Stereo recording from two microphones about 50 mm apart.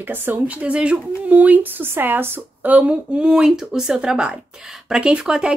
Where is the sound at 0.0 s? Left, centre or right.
Right.